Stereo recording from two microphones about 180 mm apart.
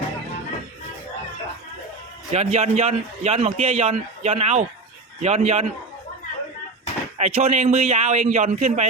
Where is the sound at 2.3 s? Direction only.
35° right (ahead or behind).